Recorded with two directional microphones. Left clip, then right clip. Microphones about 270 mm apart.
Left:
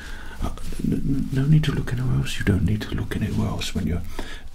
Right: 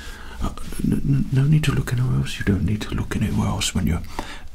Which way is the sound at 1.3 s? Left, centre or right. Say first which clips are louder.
Right 1 dB; centre.